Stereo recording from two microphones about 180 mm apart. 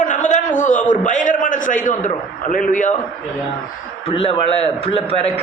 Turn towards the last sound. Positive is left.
turn(degrees=35)  # may be behind; listen again after turning